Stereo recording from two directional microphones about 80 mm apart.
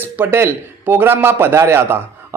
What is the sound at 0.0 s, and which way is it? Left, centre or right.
A man's voice, right.